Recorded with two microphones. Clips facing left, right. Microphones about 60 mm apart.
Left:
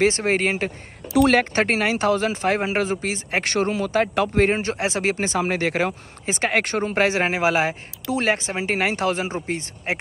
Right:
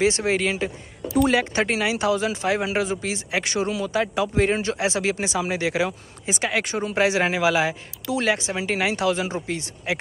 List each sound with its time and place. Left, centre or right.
0.0 s speech: left
6.9 s speech: left